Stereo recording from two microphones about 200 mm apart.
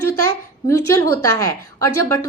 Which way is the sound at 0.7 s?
15° left (ahead or behind).